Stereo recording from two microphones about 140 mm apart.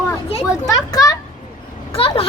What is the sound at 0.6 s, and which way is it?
Speech, 25° left (ahead or behind).